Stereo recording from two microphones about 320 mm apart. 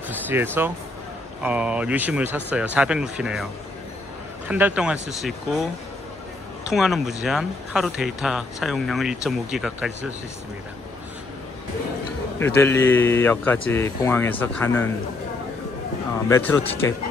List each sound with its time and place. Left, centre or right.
0.3 s speech: centre
4.5 s speech: centre
6.6 s speech: centre
12.4 s speech: centre
16.3 s speech: centre